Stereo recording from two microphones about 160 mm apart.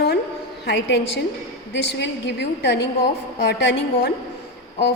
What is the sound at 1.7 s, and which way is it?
A woman's voice, 90° left.